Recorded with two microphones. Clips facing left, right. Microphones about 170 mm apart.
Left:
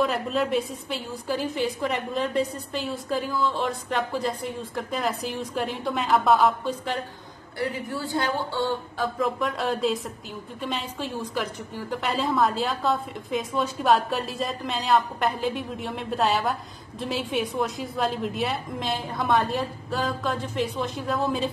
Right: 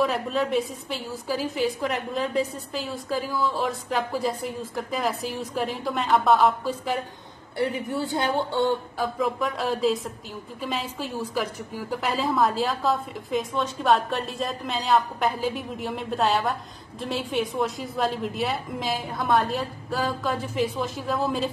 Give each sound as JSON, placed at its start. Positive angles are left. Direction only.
{"t": 0.0, "sound": "a woman's voice", "side_deg": 0}
{"t": 7.5, "sound": "speech", "side_deg": -25}
{"t": 9.2, "sound": "a woman's voice", "side_deg": 0}